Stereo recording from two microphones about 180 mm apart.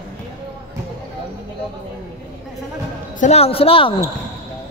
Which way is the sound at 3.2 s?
35° left (ahead or behind).